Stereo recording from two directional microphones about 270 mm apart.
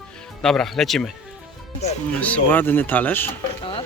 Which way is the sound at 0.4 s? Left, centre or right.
Centre.